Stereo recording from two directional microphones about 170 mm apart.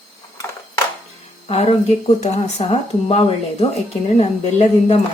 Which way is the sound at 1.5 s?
40° left (ahead or behind).